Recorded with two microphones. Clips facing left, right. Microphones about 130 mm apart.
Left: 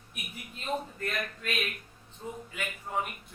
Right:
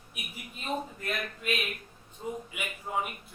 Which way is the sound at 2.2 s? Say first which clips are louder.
Right 2 dB; 10° right (ahead or behind).